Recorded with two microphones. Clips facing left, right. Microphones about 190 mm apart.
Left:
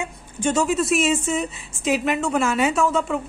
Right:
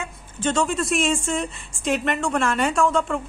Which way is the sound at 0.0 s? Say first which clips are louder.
Left 2 dB; 10° left (ahead or behind).